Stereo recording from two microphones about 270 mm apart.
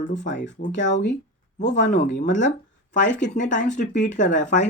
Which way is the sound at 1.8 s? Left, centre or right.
Left.